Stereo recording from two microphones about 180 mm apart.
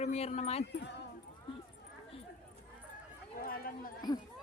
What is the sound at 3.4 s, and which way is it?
Run, 55° left (ahead or behind).